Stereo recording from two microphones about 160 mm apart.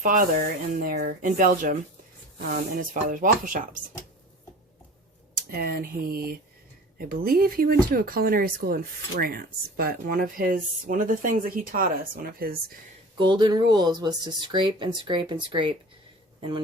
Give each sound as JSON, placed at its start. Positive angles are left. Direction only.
{"t": 0.0, "sound": "speech", "side_deg": -60}
{"t": 5.5, "sound": "speech", "side_deg": -70}
{"t": 13.1, "sound": "speech", "side_deg": -30}